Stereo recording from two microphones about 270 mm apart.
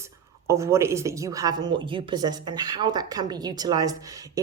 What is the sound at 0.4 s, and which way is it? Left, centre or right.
A woman's voice, centre.